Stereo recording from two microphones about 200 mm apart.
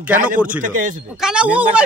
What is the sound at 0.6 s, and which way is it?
Speech, 40° right (ahead or behind).